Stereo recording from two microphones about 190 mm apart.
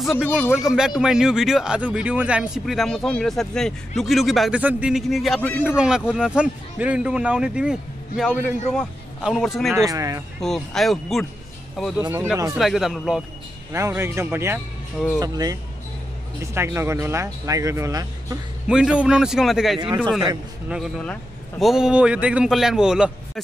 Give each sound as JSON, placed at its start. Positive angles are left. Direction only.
{"t": 0.4, "sound": "speech", "side_deg": 0}
{"t": 9.8, "sound": "speech", "side_deg": -15}
{"t": 10.4, "sound": "speech", "side_deg": 0}
{"t": 12.0, "sound": "speech", "side_deg": -15}
{"t": 12.5, "sound": "speech", "side_deg": 0}
{"t": 13.7, "sound": "speech", "side_deg": -15}
{"t": 16.5, "sound": "speech", "side_deg": -15}
{"t": 18.7, "sound": "speech", "side_deg": -5}